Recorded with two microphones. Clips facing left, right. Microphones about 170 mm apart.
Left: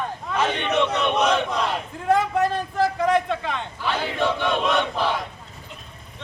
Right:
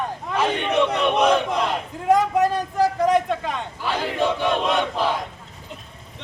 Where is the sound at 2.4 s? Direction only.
10° right (ahead or behind).